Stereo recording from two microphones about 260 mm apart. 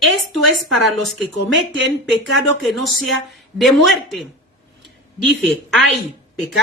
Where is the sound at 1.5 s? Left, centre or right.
Right.